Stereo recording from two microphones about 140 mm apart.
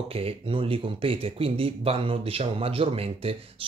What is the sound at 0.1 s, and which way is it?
Speech, 45° right (ahead or behind).